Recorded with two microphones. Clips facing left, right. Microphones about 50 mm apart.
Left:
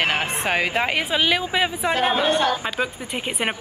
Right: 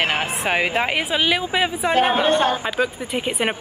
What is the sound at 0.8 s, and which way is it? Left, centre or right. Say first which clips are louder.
Speech: right 1 dB; centre.